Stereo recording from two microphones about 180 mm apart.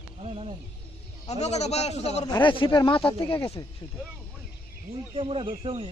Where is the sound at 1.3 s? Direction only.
35° left (ahead or behind).